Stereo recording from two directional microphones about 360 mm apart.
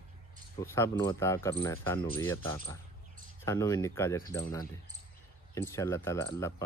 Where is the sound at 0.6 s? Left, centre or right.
Centre.